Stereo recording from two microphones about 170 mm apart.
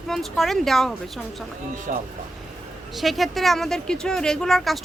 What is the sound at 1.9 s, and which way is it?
Speech, 50° right (ahead or behind).